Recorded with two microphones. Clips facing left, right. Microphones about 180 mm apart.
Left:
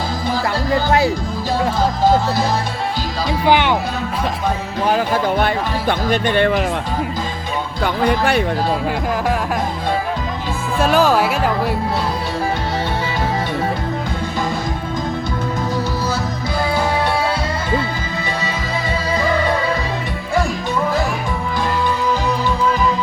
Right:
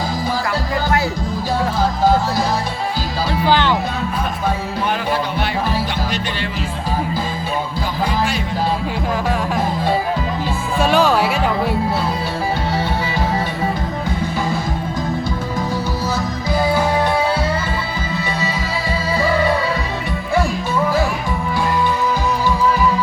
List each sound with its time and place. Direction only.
3.4 s music: 15° left (ahead or behind)
5.9 s speech: 55° left (ahead or behind)
8.0 s speech: 60° left (ahead or behind)
10.8 s speech: centre (ahead or behind)